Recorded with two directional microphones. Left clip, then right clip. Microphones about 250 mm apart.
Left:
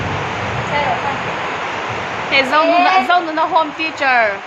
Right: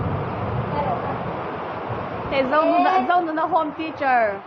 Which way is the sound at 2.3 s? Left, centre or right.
Centre.